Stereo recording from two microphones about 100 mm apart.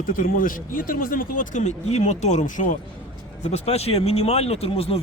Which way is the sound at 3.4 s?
90° left.